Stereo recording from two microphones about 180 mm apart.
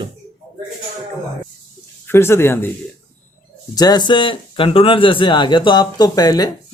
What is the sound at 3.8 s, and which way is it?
Speech, 20° left (ahead or behind).